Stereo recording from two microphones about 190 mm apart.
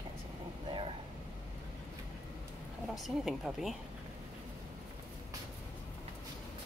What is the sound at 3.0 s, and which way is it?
Speech, centre (ahead or behind).